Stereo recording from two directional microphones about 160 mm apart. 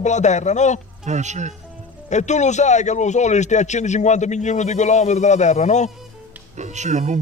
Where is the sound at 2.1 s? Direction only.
45° left (ahead or behind).